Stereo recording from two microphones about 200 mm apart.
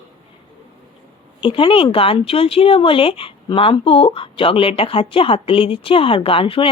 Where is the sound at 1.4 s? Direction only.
25° left (ahead or behind).